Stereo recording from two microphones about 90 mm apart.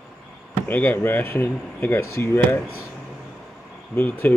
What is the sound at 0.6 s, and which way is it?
Speech, 20° left (ahead or behind).